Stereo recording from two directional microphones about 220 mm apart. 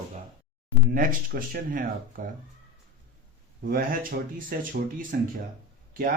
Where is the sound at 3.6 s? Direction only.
40° right (ahead or behind).